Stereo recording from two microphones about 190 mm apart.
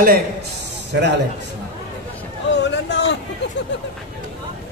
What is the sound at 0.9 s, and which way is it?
Speech, 70° right (ahead or behind).